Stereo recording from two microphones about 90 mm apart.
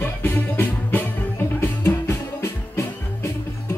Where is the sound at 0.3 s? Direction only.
20° left (ahead or behind).